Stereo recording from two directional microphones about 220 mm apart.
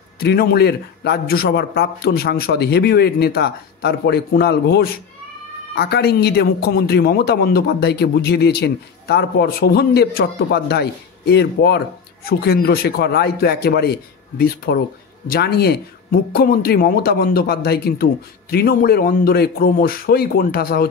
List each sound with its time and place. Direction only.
0.2 s a man's voice: 45° left (ahead or behind)